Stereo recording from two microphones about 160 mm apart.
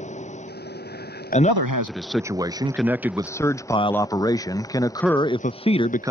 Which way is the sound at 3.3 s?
20° left (ahead or behind).